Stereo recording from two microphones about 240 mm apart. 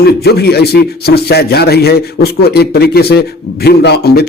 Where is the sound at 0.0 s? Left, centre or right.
Left.